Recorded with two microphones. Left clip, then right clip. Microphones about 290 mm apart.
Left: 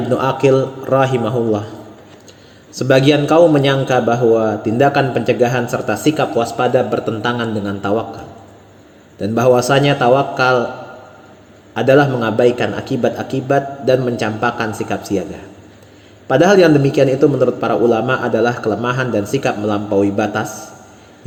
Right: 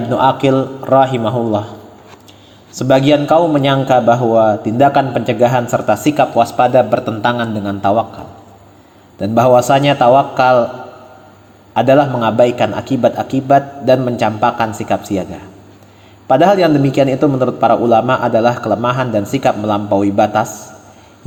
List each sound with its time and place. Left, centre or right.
0.2 s a man's voice: centre
2.8 s a man's voice: right
9.2 s a man's voice: right
11.7 s a man's voice: right
16.3 s a man's voice: right